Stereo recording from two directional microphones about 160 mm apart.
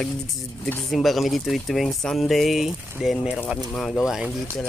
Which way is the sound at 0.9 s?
Centre (ahead or behind).